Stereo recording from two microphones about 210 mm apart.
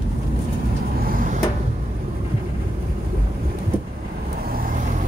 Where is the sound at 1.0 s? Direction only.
40° right (ahead or behind).